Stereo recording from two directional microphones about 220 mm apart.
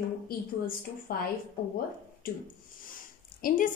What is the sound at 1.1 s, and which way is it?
Speech, 40° left (ahead or behind).